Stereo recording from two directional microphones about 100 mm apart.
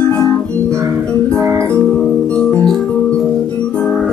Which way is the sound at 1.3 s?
30° right (ahead or behind).